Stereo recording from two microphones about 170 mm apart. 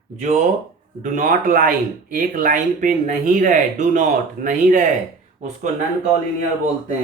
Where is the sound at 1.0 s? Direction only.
50° right (ahead or behind).